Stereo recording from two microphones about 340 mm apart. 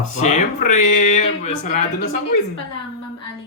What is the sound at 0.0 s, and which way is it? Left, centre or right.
A man's voice, left.